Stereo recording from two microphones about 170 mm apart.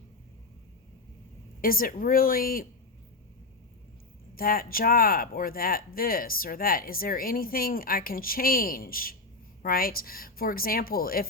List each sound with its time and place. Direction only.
1.6 s speech: 60° left (ahead or behind)
4.4 s speech: 60° left (ahead or behind)